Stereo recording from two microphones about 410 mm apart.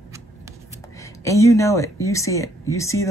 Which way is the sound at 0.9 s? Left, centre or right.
Centre.